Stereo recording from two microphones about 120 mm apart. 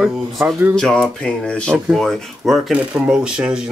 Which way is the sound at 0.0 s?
5° right (ahead or behind).